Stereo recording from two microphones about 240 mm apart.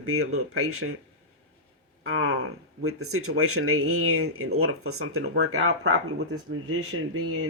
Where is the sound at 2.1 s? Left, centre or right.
Right.